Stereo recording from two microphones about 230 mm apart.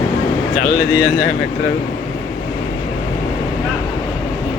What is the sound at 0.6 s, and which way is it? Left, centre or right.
Speech, left.